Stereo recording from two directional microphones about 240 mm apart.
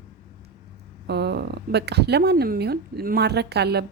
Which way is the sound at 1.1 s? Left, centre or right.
Right.